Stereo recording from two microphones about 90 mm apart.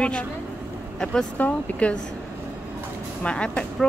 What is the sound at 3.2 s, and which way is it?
Speech, 10° left (ahead or behind).